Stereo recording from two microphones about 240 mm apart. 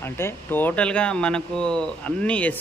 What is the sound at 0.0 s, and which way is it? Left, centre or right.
A man's voice, centre.